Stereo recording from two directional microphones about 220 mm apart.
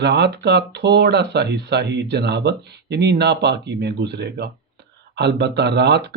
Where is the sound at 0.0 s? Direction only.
50° right (ahead or behind).